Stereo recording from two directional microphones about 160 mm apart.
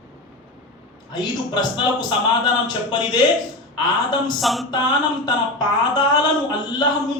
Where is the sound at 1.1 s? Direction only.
25° left (ahead or behind).